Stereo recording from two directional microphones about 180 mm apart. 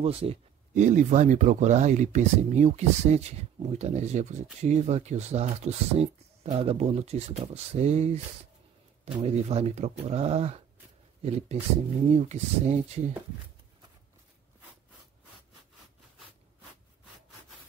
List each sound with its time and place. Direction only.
0.0 s speech: 30° right (ahead or behind)